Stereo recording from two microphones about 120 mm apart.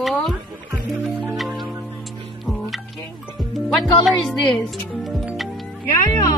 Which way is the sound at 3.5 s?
Centre (ahead or behind).